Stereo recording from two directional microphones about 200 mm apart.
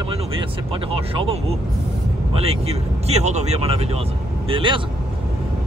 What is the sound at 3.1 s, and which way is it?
Speech, 35° right (ahead or behind).